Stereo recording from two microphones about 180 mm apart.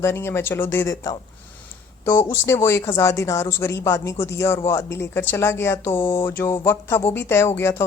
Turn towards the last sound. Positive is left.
turn(degrees=15)  # may be behind; listen again after turning